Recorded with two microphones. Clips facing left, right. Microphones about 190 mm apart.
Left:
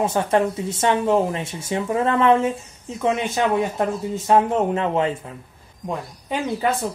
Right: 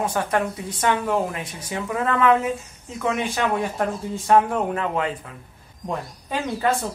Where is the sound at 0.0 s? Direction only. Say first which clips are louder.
Left 4 dB; 25° left (ahead or behind).